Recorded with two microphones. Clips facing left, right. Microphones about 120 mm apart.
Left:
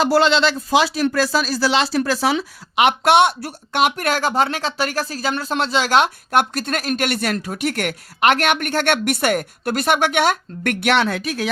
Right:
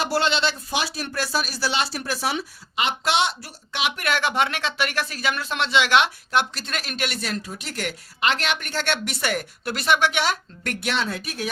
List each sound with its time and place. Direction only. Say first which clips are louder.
0.3 s speech: left 7 dB; 90° left
2.7 s speech: left 9 dB; 60° left (ahead or behind); by 11.4 s 90° left